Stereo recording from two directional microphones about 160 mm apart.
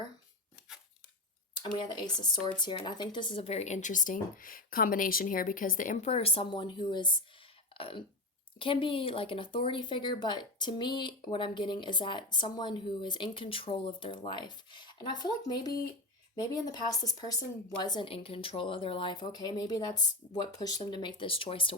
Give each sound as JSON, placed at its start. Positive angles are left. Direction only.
{"t": 1.5, "sound": "speech", "side_deg": 30}
{"t": 7.7, "sound": "throat clearing", "side_deg": 35}
{"t": 8.5, "sound": "speech", "side_deg": 30}